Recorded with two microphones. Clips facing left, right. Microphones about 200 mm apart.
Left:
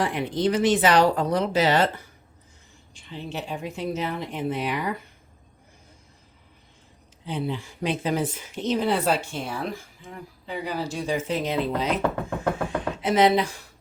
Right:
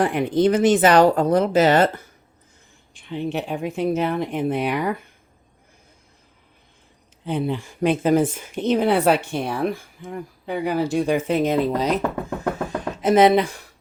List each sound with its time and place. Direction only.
0.0 s speech: 55° right (ahead or behind)
2.9 s a woman's voice: 60° right (ahead or behind)
7.3 s a woman's voice: 55° right (ahead or behind)
12.6 s a sound: 45° right (ahead or behind)